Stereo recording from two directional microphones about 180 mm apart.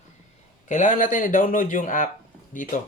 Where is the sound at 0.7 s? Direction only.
45° left (ahead or behind).